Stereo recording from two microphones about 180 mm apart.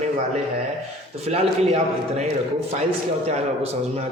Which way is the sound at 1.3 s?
35° right (ahead or behind).